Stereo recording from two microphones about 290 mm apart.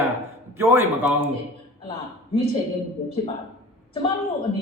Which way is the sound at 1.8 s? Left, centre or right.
Centre.